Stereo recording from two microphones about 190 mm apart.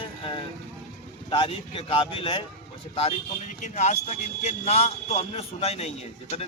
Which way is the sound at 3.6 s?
40° left (ahead or behind).